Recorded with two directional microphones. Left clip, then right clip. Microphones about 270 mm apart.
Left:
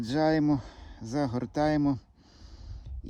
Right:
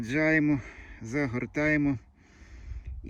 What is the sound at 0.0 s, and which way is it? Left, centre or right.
Speech, centre.